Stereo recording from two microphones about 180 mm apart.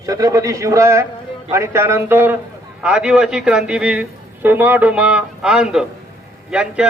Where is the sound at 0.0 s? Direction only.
20° right (ahead or behind).